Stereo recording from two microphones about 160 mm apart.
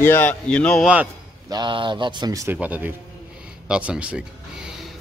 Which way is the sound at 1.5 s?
30° right (ahead or behind).